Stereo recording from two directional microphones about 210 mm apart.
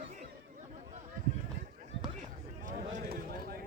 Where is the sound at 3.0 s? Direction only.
45° right (ahead or behind).